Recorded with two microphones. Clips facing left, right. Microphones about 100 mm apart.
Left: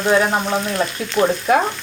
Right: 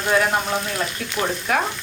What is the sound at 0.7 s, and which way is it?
Speech, centre (ahead or behind).